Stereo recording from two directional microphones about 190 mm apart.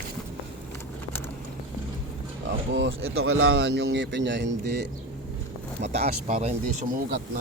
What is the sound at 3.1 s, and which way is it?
Speech, 90° right.